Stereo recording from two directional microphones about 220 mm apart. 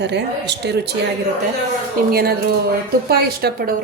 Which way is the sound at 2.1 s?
45° right (ahead or behind).